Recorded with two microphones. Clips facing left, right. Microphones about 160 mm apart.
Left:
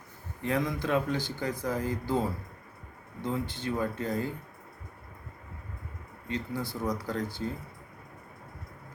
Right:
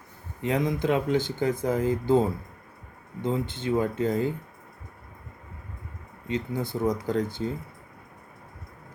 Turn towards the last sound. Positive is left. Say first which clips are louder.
# right 6 dB
turn(degrees=-20)  # may be behind; listen again after turning